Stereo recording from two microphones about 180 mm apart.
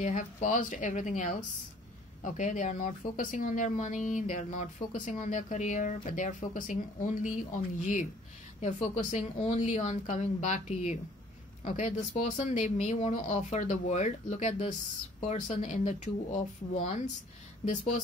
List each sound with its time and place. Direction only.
0.0 s speech: 45° left (ahead or behind)